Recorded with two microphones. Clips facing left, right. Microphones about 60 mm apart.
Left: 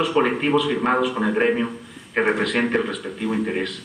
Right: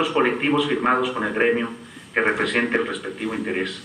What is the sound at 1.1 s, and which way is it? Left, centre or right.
A man's voice, centre.